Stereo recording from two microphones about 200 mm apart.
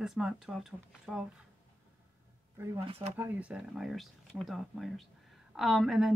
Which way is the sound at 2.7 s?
30° right (ahead or behind).